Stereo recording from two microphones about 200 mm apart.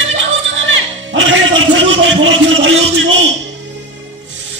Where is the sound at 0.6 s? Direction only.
70° right (ahead or behind).